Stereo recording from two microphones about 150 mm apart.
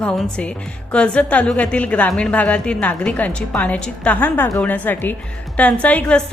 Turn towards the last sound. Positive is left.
turn(degrees=10)  # may be behind; listen again after turning